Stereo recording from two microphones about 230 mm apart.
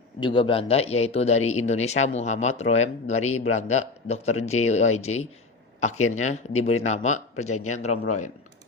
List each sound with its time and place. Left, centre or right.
0.2 s a man's voice: left